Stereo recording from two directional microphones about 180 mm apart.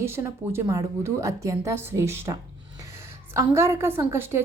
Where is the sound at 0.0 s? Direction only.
15° right (ahead or behind).